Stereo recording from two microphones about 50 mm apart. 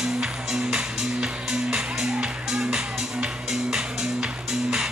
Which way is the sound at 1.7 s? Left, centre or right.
Centre.